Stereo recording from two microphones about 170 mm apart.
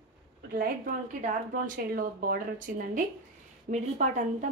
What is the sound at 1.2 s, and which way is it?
A woman's voice, 50° right (ahead or behind).